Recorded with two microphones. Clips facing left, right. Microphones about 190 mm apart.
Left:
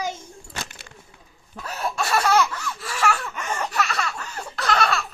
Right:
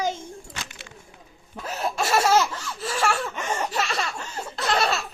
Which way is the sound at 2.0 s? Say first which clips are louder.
Even; 25° right (ahead or behind).